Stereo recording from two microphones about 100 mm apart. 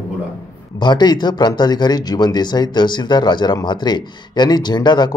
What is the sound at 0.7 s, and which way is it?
Speech, 45° left (ahead or behind).